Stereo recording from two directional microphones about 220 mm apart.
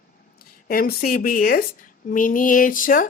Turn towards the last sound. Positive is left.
turn(degrees=40)  # may be behind; listen again after turning